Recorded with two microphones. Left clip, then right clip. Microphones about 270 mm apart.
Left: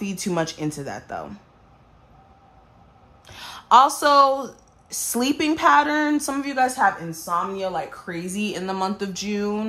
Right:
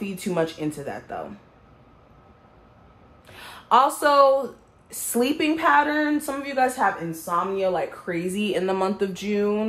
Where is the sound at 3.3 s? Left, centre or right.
Left.